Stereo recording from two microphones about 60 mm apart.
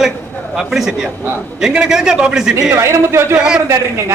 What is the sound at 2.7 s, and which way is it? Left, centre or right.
Speech, right.